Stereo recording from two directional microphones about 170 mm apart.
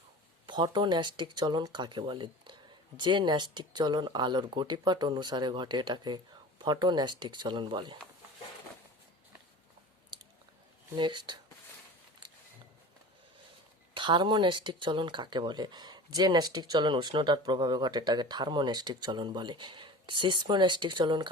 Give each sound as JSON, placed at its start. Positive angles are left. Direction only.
{"t": 0.4, "sound": "speech", "side_deg": -25}
{"t": 10.9, "sound": "speech", "side_deg": -25}
{"t": 13.9, "sound": "speech", "side_deg": -30}